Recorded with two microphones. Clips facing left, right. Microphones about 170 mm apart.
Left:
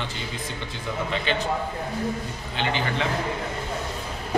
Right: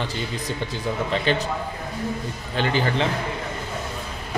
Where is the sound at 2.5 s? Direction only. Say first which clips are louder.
Right 4 dB; 35° right (ahead or behind).